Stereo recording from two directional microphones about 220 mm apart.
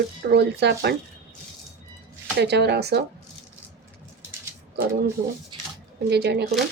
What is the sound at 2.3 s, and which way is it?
Speech, 50° right (ahead or behind).